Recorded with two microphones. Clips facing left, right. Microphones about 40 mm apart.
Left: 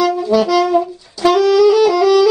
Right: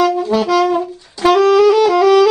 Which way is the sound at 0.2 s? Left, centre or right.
Right.